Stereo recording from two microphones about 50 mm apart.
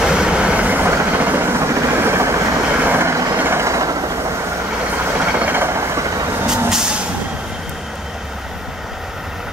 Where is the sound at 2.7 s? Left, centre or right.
Right.